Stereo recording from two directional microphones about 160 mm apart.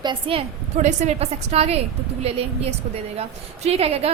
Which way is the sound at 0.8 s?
40° right (ahead or behind).